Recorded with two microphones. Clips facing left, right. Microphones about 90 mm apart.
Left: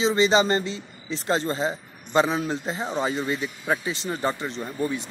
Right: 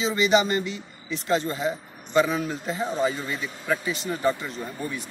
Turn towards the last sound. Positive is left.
turn(degrees=25)  # may be behind; listen again after turning